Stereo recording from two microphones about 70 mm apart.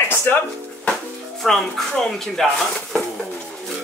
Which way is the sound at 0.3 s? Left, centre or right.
Left.